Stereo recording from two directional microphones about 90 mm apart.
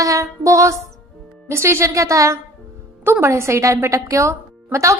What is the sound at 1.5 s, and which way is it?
Speech, 30° right (ahead or behind).